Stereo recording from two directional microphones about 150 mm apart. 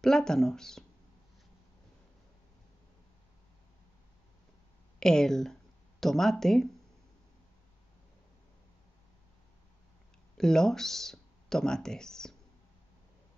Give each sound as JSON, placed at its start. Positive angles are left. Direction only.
{"t": 0.0, "sound": "speech", "side_deg": 5}
{"t": 5.0, "sound": "speech", "side_deg": 5}
{"t": 10.3, "sound": "speech", "side_deg": 5}